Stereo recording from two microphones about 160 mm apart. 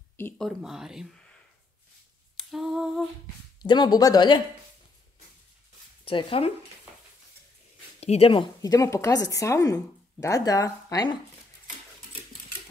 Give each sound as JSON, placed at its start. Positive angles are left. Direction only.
{"t": 0.4, "sound": "speech", "side_deg": 0}
{"t": 2.3, "sound": "humming", "side_deg": 0}
{"t": 3.6, "sound": "a woman's voice", "side_deg": 25}
{"t": 6.0, "sound": "speech", "side_deg": 35}
{"t": 8.0, "sound": "a woman's voice", "side_deg": 40}